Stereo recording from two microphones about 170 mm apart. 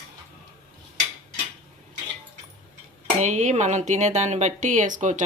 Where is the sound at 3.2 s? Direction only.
45° right (ahead or behind).